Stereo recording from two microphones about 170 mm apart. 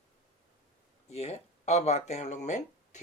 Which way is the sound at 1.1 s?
40° left (ahead or behind).